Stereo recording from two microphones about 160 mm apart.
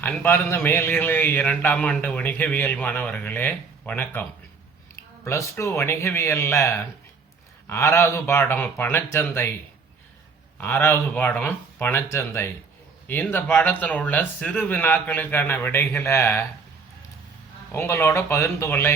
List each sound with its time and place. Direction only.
0.0 s a man's voice: 10° left (ahead or behind)
10.6 s a man's voice: 10° left (ahead or behind)
17.7 s a man's voice: 15° left (ahead or behind)